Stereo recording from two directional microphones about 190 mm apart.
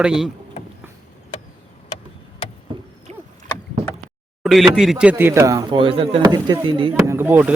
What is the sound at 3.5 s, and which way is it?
Rowboat, 10° left (ahead or behind).